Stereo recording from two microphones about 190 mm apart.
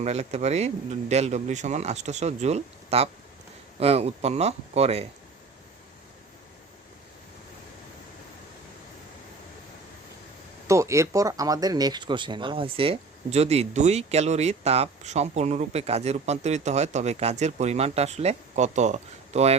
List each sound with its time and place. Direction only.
0.0 s speech: 35° right (ahead or behind)
10.7 s speech: 15° right (ahead or behind); by 19.5 s 35° right (ahead or behind)